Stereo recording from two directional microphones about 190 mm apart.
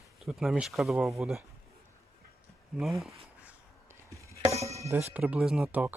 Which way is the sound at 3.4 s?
10° right (ahead or behind).